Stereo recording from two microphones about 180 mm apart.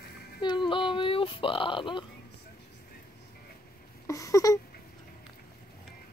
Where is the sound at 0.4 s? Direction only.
25° left (ahead or behind).